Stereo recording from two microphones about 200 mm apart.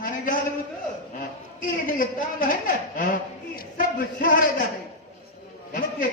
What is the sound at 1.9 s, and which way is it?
A woman's voice, 45° left (ahead or behind).